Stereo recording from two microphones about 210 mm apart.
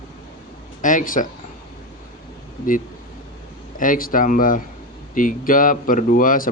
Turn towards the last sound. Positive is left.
turn(degrees=40)  # may be behind; listen again after turning